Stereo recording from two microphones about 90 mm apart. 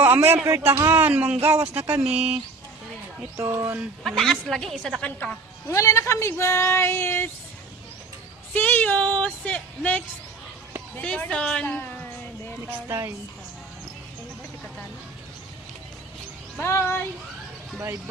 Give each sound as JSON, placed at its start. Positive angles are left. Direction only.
{"t": 0.0, "sound": "a man's voice", "side_deg": -25}
{"t": 1.1, "sound": "speech", "side_deg": -10}
{"t": 1.4, "sound": "a man's voice", "side_deg": -30}
{"t": 2.0, "sound": "speech", "side_deg": -10}
{"t": 3.3, "sound": "a man's voice", "side_deg": -30}
{"t": 4.0, "sound": "a woman's voice", "side_deg": 5}
{"t": 5.6, "sound": "speech", "side_deg": 35}
{"t": 8.5, "sound": "speech", "side_deg": 15}
{"t": 11.0, "sound": "speech", "side_deg": 15}
{"t": 12.6, "sound": "a man's voice", "side_deg": -20}
{"t": 16.6, "sound": "music", "side_deg": 30}